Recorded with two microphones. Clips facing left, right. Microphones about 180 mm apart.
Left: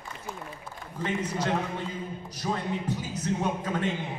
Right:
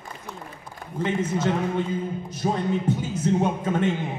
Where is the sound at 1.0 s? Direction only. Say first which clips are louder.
Right 5 dB; 25° right (ahead or behind).